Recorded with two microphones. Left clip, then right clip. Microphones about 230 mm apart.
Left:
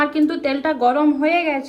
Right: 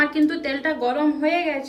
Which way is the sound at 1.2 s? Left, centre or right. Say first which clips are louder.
Left 4 dB; left.